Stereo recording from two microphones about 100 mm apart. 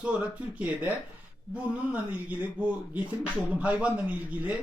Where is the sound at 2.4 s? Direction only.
15° right (ahead or behind).